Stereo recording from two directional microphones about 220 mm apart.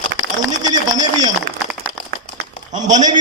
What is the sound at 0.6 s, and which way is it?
Speech, 15° right (ahead or behind).